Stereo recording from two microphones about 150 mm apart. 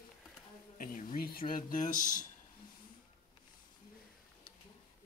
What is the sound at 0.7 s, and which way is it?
Speech, 65° left (ahead or behind).